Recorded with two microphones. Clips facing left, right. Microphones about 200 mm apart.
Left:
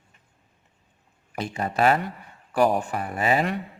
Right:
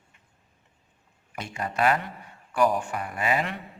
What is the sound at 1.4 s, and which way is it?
A man's voice, 35° left (ahead or behind).